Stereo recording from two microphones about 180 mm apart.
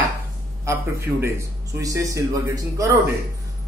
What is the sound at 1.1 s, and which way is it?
Speech, 15° right (ahead or behind).